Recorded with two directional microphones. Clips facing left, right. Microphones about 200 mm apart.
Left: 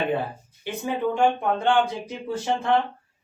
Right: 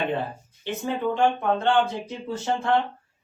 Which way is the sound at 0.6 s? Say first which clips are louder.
Left 1 dB; 15° left (ahead or behind).